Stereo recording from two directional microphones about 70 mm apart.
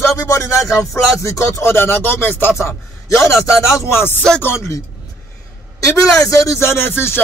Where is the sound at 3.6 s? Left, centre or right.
Left.